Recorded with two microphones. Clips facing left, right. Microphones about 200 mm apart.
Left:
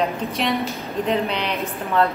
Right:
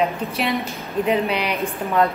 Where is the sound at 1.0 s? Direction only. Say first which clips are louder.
Right 2 dB; 10° right (ahead or behind).